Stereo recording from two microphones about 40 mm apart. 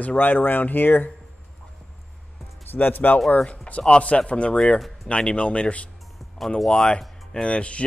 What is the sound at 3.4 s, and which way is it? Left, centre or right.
Speech, left.